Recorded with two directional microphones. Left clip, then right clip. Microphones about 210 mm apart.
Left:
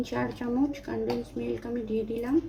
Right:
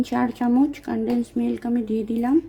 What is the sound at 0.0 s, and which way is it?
Speech, 55° right (ahead or behind).